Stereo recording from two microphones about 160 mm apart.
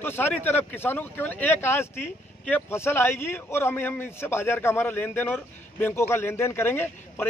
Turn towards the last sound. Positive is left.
turn(degrees=15)  # may be behind; listen again after turning